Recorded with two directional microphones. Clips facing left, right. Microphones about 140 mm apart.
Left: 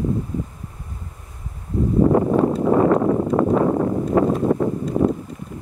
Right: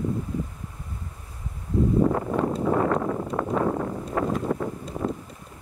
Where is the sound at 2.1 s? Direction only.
30° left (ahead or behind).